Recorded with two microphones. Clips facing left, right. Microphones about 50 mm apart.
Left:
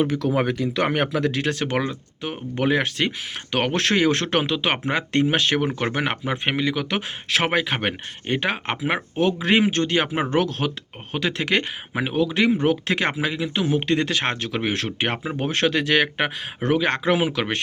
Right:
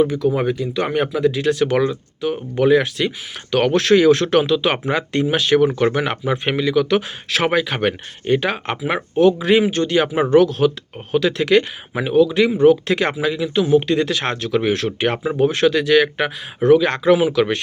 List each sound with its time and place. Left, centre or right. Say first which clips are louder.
0.3 s speech: right 2 dB; left
0.8 s speech: right 1 dB; left
1.1 s speech: right 5 dB; left
1.4 s speech: right 6 dB; left
1.7 s speech: right 6 dB; left
5.5 s speech: right 7 dB; left
9.1 s speech: right 7 dB; left
15.4 s speech: right 6 dB; left